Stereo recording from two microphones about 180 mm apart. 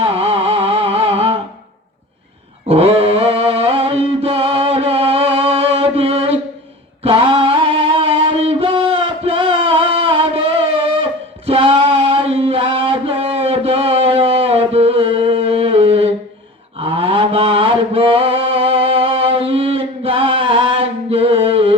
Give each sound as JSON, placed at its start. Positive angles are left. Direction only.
{"t": 0.0, "sound": "music", "side_deg": -30}
{"t": 2.6, "sound": "a sound", "side_deg": -35}
{"t": 9.2, "sound": "music", "side_deg": -30}
{"t": 11.0, "sound": "singing", "side_deg": -30}
{"t": 16.7, "sound": "mantra", "side_deg": -30}